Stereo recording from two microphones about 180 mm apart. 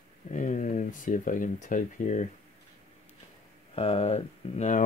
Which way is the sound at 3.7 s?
35° left (ahead or behind).